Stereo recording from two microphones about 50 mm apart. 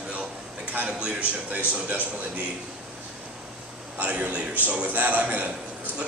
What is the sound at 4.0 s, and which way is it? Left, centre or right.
A man's voice, right.